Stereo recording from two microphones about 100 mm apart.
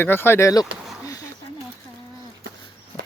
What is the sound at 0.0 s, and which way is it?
Speech, 25° left (ahead or behind).